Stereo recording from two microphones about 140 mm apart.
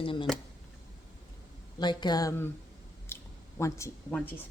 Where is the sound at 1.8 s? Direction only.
30° left (ahead or behind).